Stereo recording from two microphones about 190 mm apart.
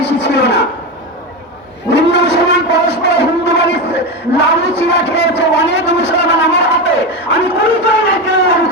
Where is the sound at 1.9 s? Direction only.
65° left (ahead or behind).